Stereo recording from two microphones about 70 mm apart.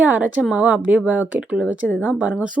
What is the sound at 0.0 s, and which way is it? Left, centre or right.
Speech, right.